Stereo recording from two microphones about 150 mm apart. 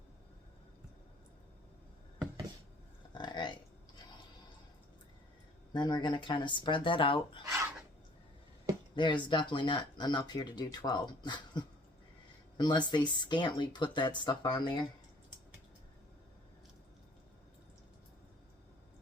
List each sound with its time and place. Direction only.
3.2 s a sound: 30° left (ahead or behind)
5.7 s speech: 30° left (ahead or behind)
9.0 s speech: 30° left (ahead or behind)